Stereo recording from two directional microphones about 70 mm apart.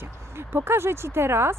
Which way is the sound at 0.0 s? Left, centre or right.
Right.